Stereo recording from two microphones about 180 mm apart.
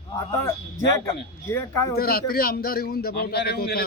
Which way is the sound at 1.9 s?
60° left (ahead or behind).